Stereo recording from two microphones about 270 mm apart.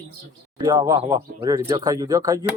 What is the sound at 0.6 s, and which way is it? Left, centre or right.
Speech, centre.